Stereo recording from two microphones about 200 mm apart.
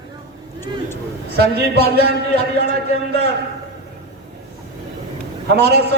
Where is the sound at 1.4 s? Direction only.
55° right (ahead or behind).